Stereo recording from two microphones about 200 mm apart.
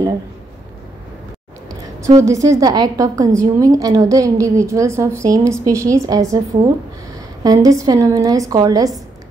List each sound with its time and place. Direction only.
1.7 s a sound: 15° right (ahead or behind)
2.2 s a woman's voice: 15° right (ahead or behind)
7.4 s a woman's voice: 15° right (ahead or behind)